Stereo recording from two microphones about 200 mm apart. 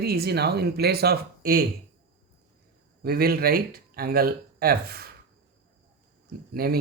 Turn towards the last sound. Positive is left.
turn(degrees=-50)  # may be behind; listen again after turning